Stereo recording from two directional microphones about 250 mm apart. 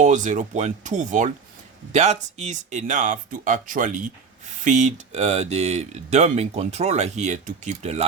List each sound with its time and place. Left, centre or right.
0.0 s speech: right